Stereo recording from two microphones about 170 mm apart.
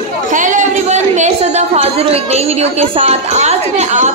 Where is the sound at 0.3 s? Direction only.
50° right (ahead or behind).